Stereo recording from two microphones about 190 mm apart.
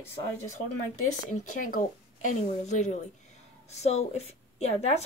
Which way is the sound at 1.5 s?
45° left (ahead or behind).